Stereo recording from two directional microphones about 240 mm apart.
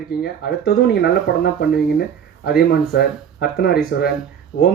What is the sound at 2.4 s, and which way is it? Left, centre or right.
Speech, left.